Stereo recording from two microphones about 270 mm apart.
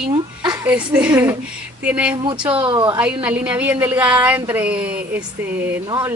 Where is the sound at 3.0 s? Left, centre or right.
Centre.